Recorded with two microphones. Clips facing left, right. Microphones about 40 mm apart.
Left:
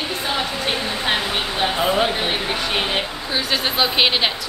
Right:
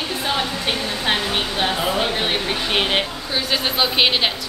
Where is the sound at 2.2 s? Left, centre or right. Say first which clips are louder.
Even; centre.